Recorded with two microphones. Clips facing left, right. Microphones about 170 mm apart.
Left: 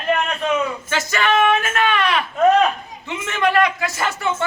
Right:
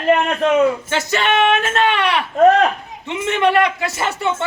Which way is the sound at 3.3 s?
25° right (ahead or behind).